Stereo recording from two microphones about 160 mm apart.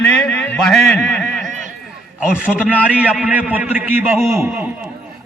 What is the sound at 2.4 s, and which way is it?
A man's voice, 10° right (ahead or behind).